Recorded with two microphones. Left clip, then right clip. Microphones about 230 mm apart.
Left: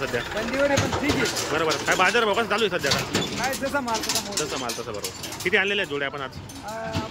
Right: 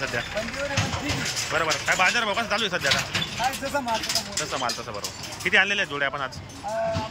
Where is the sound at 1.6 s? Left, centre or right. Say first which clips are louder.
Left 1 dB; centre.